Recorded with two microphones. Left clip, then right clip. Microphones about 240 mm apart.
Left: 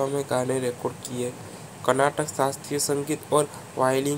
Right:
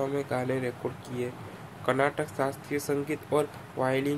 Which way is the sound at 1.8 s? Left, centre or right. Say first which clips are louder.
Left 5 dB; centre.